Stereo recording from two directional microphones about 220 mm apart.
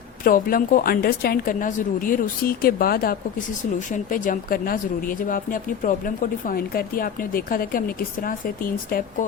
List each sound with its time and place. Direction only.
0.3 s speech: 40° left (ahead or behind)